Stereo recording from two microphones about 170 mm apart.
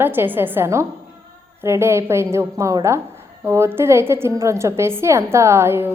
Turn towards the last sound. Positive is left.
turn(degrees=-15)  # may be behind; listen again after turning